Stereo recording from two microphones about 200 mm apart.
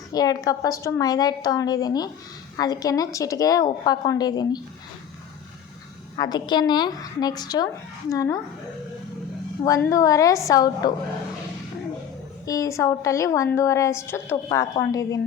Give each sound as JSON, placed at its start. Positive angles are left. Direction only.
{"t": 0.1, "sound": "a woman's voice", "side_deg": 20}
{"t": 6.1, "sound": "a woman's voice", "side_deg": 20}
{"t": 9.6, "sound": "a woman's voice", "side_deg": 15}
{"t": 12.5, "sound": "a woman's voice", "side_deg": 15}